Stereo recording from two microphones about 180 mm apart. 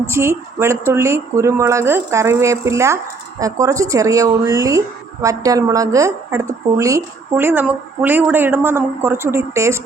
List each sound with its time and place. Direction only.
0.1 s speech: 15° right (ahead or behind)